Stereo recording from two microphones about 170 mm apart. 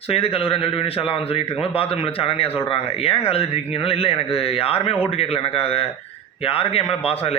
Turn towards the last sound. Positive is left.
turn(degrees=35)  # may be behind; listen again after turning